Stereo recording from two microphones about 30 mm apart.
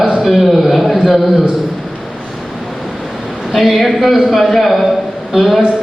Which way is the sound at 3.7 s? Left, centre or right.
Centre.